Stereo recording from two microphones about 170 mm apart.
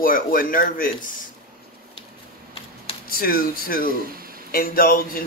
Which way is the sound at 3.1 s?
60° left (ahead or behind).